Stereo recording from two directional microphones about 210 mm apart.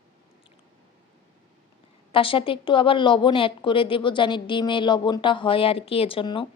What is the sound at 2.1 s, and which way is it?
A woman's voice, 25° left (ahead or behind).